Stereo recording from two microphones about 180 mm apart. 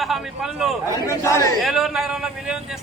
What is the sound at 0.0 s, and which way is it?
Speech, centre (ahead or behind).